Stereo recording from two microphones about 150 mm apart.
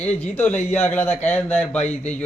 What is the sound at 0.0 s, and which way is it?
Speech, 10° left (ahead or behind).